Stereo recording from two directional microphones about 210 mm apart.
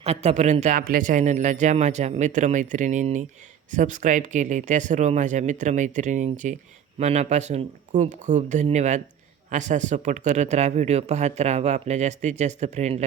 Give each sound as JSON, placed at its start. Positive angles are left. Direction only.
{"t": 0.0, "sound": "speech", "side_deg": -30}